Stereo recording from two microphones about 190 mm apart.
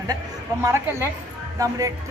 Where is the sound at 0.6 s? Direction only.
15° right (ahead or behind).